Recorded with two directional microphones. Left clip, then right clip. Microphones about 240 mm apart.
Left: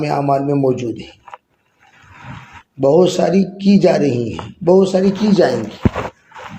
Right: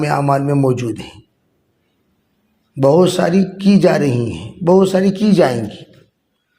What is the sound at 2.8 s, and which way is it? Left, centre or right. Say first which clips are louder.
A man's voice: even; right.